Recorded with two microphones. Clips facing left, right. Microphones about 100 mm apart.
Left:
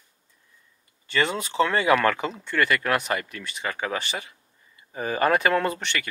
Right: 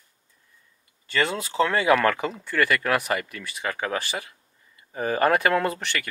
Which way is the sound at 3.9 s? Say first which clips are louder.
Right 1 dB; 10° right (ahead or behind).